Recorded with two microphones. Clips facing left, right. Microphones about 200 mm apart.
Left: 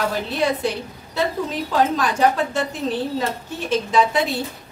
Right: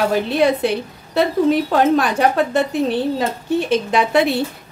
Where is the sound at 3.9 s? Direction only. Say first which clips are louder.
Right 1 dB; 65° right (ahead or behind).